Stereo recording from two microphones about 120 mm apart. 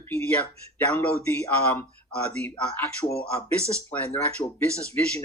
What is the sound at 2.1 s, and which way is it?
Speech, 10° left (ahead or behind).